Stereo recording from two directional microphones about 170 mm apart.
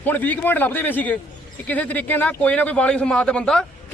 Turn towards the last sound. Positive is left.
turn(degrees=5)  # may be behind; listen again after turning